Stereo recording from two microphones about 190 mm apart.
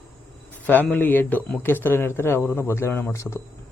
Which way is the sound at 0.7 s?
10° left (ahead or behind).